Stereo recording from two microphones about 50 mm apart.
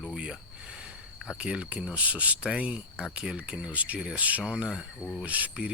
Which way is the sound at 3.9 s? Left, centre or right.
Centre.